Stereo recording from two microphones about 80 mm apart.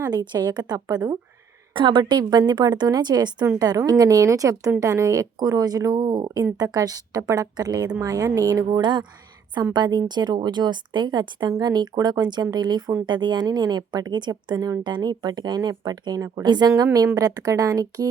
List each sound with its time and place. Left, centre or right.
0.1 s speech: right
1.7 s a woman's voice: right
3.6 s speech: right
13.1 s speech: right